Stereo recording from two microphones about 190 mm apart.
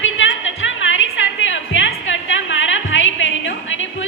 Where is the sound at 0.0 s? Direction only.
90° left.